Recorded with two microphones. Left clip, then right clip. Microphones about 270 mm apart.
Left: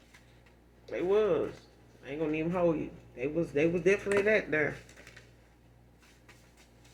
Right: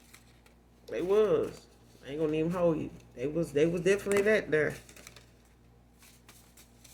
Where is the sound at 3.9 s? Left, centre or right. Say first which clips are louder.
Left 1 dB; right.